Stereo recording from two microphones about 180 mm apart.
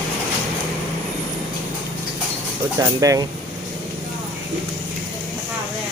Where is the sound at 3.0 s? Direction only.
20° right (ahead or behind).